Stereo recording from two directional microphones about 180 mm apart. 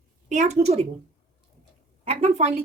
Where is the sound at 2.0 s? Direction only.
35° right (ahead or behind).